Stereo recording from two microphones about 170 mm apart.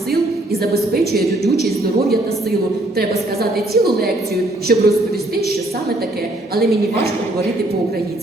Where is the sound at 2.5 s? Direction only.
65° right (ahead or behind).